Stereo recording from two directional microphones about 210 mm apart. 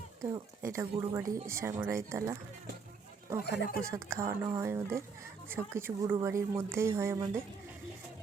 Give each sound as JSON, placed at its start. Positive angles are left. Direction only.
{"t": 0.2, "sound": "speech", "side_deg": -15}
{"t": 3.4, "sound": "speech", "side_deg": 55}
{"t": 3.9, "sound": "speech", "side_deg": -15}